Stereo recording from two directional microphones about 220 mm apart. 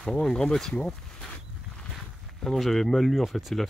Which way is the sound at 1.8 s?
Centre (ahead or behind).